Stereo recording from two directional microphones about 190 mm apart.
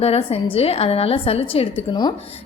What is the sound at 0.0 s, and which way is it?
A woman's voice, 30° left (ahead or behind).